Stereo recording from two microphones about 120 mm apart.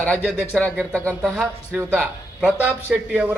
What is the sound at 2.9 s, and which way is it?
Speech, 15° right (ahead or behind).